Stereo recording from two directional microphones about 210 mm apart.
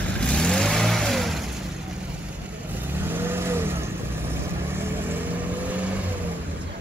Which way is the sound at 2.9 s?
10° right (ahead or behind).